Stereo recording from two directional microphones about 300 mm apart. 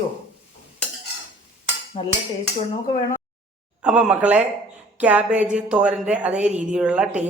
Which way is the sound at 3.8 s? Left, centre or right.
Centre.